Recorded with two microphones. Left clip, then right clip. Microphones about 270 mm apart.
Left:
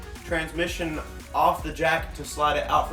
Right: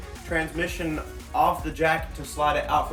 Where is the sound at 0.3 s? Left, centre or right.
Centre.